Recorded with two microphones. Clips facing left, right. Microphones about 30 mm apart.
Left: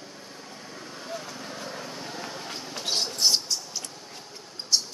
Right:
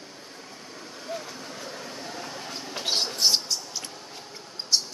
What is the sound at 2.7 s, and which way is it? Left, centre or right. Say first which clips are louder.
Mouse: right 2 dB; centre.